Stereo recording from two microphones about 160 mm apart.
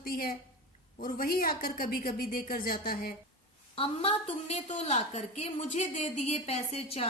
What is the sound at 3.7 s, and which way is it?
A woman's voice, 40° left (ahead or behind).